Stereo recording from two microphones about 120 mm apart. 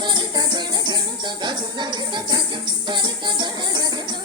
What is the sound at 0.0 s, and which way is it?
Music, 40° right (ahead or behind).